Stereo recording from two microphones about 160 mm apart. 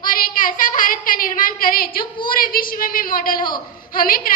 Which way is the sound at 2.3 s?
60° left (ahead or behind).